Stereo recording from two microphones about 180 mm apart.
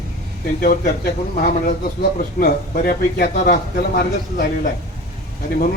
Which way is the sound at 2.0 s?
55° left (ahead or behind).